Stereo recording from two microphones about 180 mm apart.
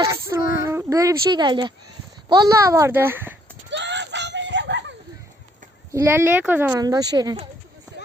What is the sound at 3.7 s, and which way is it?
Screaming, 75° right (ahead or behind).